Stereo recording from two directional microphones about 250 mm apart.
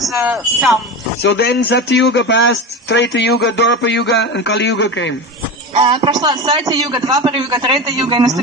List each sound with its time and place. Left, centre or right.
0.0 s speech: centre
1.3 s a man's voice: left
5.8 s a man's voice: centre